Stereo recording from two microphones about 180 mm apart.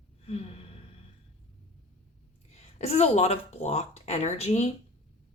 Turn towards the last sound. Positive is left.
turn(degrees=35)  # may be behind; listen again after turning